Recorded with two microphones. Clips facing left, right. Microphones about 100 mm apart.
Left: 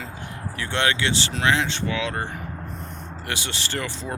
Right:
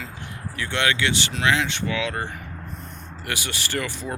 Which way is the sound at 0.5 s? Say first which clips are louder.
Even; 30° left (ahead or behind).